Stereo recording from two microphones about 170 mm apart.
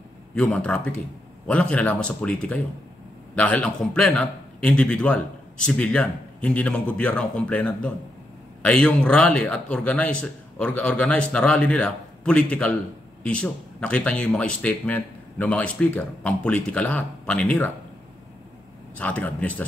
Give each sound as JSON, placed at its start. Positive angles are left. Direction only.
{"t": 0.3, "sound": "a man's voice", "side_deg": 5}
{"t": 18.9, "sound": "a man's voice", "side_deg": 10}